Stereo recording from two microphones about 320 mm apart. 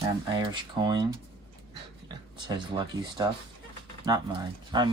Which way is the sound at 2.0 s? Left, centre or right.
Centre.